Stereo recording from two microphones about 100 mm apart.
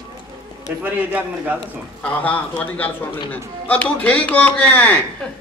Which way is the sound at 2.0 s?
15° left (ahead or behind).